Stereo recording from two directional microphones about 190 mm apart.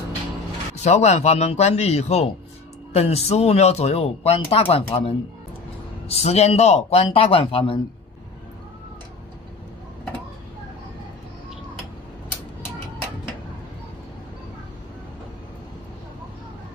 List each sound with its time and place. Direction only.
0.8 s speech: 35° left (ahead or behind)